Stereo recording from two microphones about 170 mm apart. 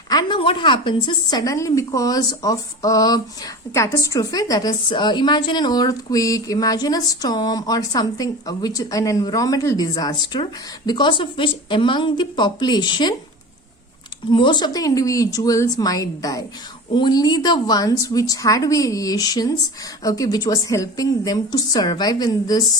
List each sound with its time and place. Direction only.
0.1 s a woman's voice: 25° left (ahead or behind)
14.3 s a woman's voice: 30° left (ahead or behind)